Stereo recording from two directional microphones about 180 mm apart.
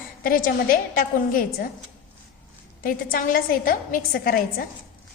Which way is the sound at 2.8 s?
50° left (ahead or behind).